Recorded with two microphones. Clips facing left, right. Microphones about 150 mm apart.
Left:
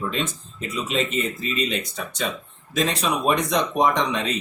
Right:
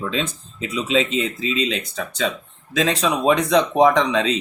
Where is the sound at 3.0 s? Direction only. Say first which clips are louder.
Right 5 dB; 90° right.